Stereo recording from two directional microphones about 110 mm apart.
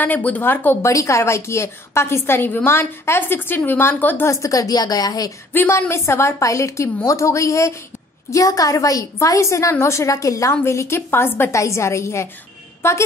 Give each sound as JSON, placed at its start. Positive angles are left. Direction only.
{"t": 0.0, "sound": "a woman's voice", "side_deg": 15}
{"t": 4.3, "sound": "a woman's voice", "side_deg": 30}
{"t": 5.5, "sound": "a woman's voice", "side_deg": 20}